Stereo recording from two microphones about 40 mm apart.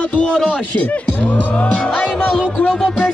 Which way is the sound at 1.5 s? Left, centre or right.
Left.